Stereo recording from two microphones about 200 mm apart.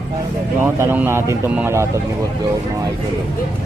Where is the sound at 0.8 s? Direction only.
10° right (ahead or behind).